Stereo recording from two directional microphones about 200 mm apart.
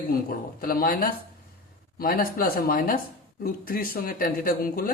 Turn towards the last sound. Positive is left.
turn(degrees=45)  # may be behind; listen again after turning